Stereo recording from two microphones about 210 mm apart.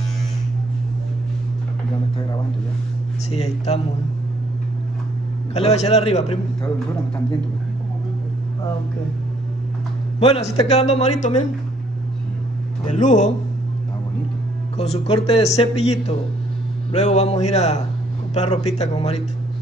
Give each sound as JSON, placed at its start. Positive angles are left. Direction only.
{"t": 3.3, "sound": "speech", "side_deg": 30}
{"t": 5.5, "sound": "speech", "side_deg": 30}
{"t": 10.2, "sound": "speech", "side_deg": 30}
{"t": 12.8, "sound": "speech", "side_deg": 35}
{"t": 14.8, "sound": "speech", "side_deg": 30}